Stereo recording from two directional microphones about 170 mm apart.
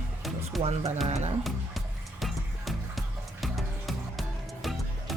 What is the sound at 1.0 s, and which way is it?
Speech, 40° right (ahead or behind).